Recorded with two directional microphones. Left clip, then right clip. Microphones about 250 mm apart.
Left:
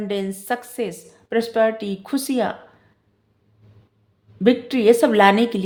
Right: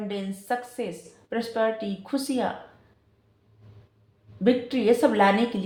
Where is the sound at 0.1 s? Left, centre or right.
Left.